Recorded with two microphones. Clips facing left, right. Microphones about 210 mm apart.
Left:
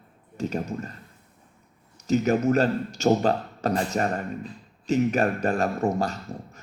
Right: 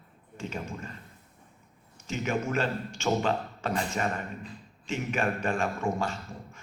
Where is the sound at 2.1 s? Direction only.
40° left (ahead or behind).